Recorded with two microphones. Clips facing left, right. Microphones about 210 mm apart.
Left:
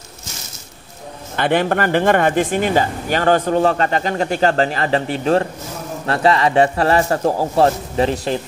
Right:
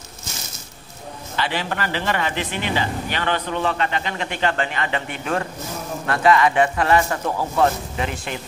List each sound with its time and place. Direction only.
1.3 s a man's voice: 55° left (ahead or behind); by 8.4 s 35° left (ahead or behind)